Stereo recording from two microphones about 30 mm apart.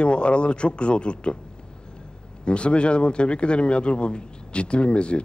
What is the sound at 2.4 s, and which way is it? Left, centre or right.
A man's voice, left.